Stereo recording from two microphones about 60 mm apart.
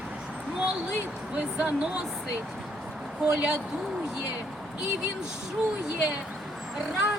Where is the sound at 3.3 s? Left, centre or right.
Centre.